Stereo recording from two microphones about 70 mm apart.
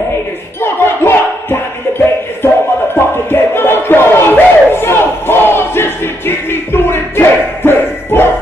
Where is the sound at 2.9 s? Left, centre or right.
Left.